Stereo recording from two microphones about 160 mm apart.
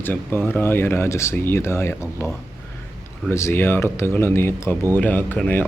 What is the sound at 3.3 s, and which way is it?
Speech, 15° left (ahead or behind).